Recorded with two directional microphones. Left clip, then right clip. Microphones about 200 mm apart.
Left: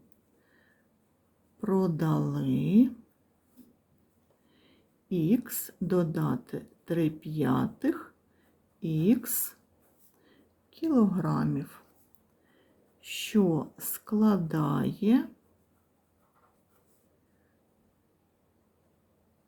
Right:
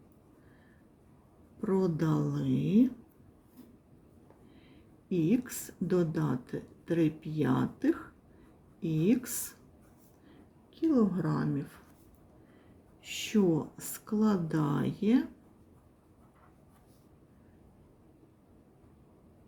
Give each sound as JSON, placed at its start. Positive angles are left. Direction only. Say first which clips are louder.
{"t": 1.6, "sound": "a woman's voice", "louder": "left 1 dB", "side_deg": 20}
{"t": 5.0, "sound": "a woman's voice", "louder": "left 1 dB", "side_deg": 20}
{"t": 10.8, "sound": "a woman's voice", "louder": "left 1 dB", "side_deg": 25}
{"t": 13.0, "sound": "a woman's voice", "louder": "left 2 dB", "side_deg": 20}